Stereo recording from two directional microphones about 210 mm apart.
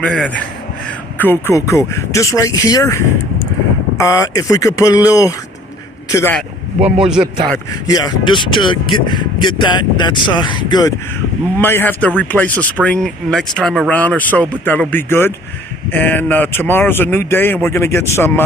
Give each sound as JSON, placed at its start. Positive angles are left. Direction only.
{"t": 0.0, "sound": "speech", "side_deg": 5}
{"t": 7.0, "sound": "speech", "side_deg": -5}
{"t": 7.7, "sound": "speech", "side_deg": 20}